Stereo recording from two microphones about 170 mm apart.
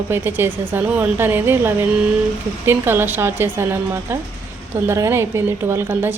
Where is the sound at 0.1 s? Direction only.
10° right (ahead or behind).